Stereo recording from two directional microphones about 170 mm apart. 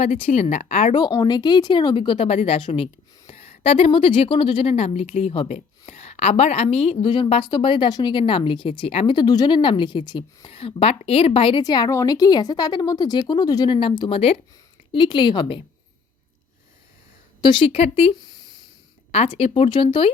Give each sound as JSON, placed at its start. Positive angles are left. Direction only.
{"t": 0.0, "sound": "a woman's voice", "side_deg": 35}
{"t": 0.9, "sound": "a woman's voice", "side_deg": 25}
{"t": 17.4, "sound": "speech", "side_deg": 30}
{"t": 19.1, "sound": "a woman's voice", "side_deg": 35}